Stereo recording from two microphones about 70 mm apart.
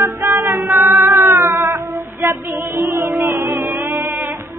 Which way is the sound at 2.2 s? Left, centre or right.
Right.